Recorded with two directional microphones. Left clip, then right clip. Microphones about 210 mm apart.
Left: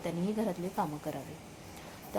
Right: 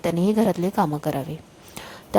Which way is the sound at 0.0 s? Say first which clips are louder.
Right 13 dB; 50° right (ahead or behind).